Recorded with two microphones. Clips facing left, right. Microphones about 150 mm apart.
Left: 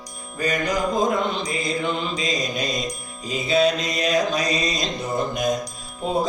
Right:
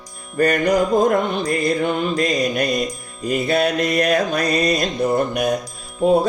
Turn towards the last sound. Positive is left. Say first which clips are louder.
# right 11 dB
turn(degrees=-60)  # may be behind; listen again after turning